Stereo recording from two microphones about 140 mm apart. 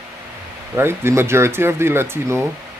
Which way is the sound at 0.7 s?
15° right (ahead or behind).